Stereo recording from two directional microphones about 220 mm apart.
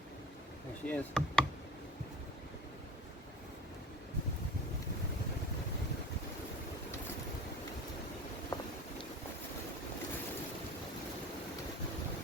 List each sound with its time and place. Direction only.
0.9 s speech: 5° left (ahead or behind)
8.5 s vehicle: 15° left (ahead or behind)